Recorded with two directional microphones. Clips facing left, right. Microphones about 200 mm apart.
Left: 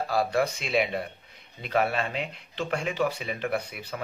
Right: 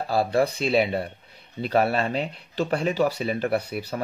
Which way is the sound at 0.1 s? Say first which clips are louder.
Right 4 dB; 30° right (ahead or behind).